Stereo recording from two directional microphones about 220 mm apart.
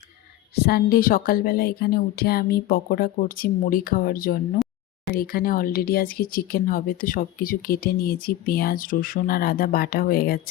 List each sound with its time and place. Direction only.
0.5 s speech: 45° left (ahead or behind)